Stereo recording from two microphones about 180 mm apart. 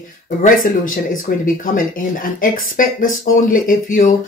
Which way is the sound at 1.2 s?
50° left (ahead or behind).